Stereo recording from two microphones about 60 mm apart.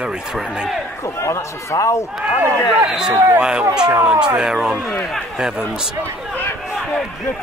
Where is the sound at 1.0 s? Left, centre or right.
Left.